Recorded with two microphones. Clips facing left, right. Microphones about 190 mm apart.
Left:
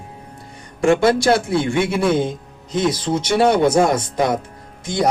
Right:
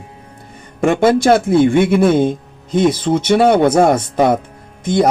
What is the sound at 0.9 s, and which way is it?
A man's voice, 50° right (ahead or behind).